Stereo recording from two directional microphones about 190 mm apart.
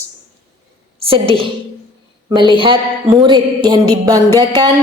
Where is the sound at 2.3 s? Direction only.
25° right (ahead or behind).